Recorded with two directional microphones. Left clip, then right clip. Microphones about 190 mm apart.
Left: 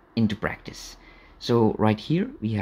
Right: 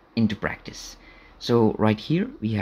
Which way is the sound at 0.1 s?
5° left (ahead or behind).